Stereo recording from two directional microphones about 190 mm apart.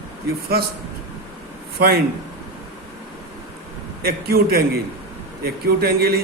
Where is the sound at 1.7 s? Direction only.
55° right (ahead or behind).